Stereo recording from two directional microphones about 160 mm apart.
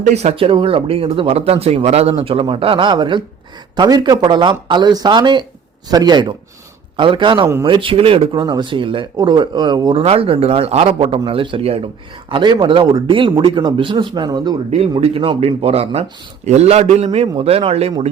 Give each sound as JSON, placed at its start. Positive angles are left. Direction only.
{"t": 0.0, "sound": "speech", "side_deg": -45}
{"t": 10.0, "sound": "speech", "side_deg": -40}
{"t": 14.7, "sound": "speech", "side_deg": -40}